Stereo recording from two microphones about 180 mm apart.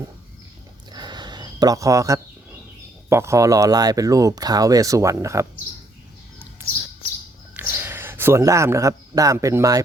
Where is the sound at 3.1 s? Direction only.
15° right (ahead or behind).